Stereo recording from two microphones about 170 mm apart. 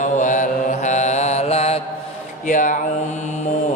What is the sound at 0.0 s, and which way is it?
Mantra, 50° left (ahead or behind).